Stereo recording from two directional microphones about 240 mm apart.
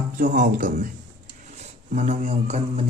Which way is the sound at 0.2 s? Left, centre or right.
Right.